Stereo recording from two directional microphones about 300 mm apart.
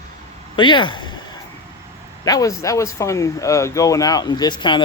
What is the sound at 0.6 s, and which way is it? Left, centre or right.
Speech, centre.